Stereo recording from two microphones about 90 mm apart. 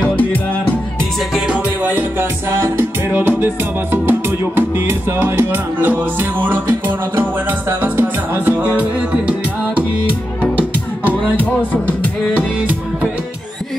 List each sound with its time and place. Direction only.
0.0 s music: 20° left (ahead or behind)
1.3 s music: 15° right (ahead or behind)
7.8 s music: 20° right (ahead or behind)
11.7 s music: 15° left (ahead or behind)
12.4 s music: 15° right (ahead or behind)